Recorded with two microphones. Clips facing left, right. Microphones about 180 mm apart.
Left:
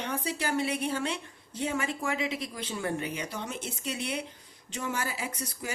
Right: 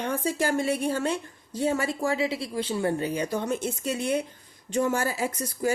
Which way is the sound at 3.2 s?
45° right (ahead or behind).